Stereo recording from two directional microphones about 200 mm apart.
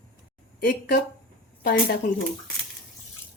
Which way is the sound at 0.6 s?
50° left (ahead or behind).